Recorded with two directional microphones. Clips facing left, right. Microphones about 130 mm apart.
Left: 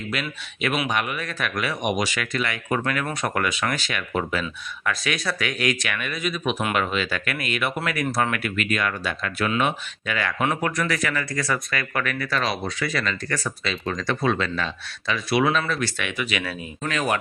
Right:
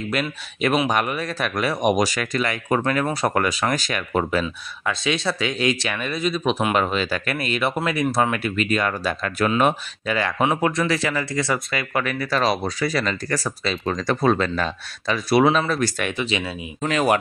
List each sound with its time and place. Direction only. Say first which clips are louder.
0.1 s speech: right 5 dB; 40° right (ahead or behind)
4.8 s speech: right 3 dB; 25° right (ahead or behind)
10.4 s speech: right 4 dB; 20° right (ahead or behind); by 16.1 s 40° right (ahead or behind)
16.2 s speech: right 2 dB; 25° right (ahead or behind)